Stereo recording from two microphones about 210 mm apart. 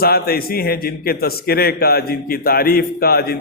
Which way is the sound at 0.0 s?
45° left (ahead or behind).